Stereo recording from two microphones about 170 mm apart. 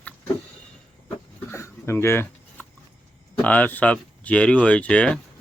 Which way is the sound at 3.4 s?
10° left (ahead or behind).